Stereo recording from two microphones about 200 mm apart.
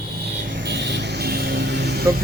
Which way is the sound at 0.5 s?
60° right (ahead or behind).